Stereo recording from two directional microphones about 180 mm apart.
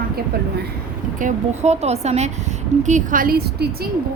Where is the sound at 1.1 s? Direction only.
40° right (ahead or behind).